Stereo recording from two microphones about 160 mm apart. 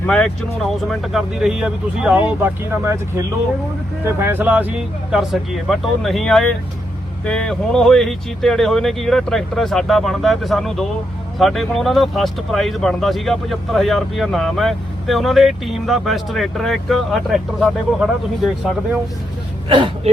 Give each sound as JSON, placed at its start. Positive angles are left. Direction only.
{"t": 0.0, "sound": "speech", "side_deg": 5}
{"t": 4.0, "sound": "speech", "side_deg": -15}
{"t": 19.6, "sound": "speech", "side_deg": -30}